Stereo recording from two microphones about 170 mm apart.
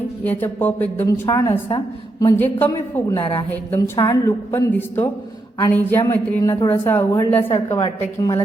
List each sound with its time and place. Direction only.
0.3 s a woman's voice: 10° left (ahead or behind)